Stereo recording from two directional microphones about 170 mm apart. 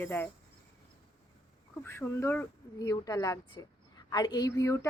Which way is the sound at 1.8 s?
15° left (ahead or behind).